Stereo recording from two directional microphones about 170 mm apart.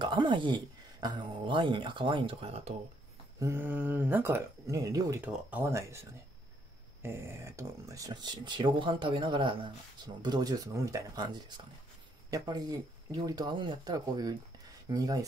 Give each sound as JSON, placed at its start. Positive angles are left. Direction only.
{"t": 0.0, "sound": "a sound", "side_deg": -25}
{"t": 1.0, "sound": "speech", "side_deg": -30}
{"t": 3.3, "sound": "speech", "side_deg": -15}